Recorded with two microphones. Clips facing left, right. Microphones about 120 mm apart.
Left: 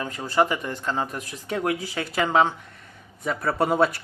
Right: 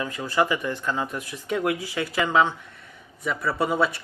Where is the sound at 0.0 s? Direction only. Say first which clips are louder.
Left 1 dB; 35° left (ahead or behind).